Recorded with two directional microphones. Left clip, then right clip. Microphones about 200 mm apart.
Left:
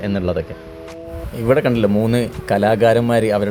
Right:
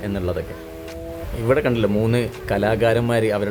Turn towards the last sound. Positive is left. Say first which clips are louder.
# left 4 dB
turn(degrees=10)  # may be behind; listen again after turning